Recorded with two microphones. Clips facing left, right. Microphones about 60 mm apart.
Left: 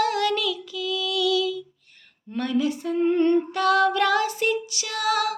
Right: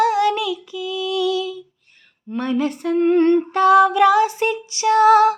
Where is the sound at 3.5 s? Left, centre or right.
Right.